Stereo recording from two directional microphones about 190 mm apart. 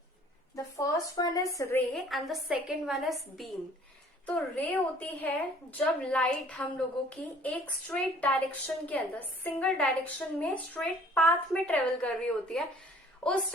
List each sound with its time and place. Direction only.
0.5 s a woman's voice: 20° left (ahead or behind)
1.9 s a woman's voice: centre (ahead or behind)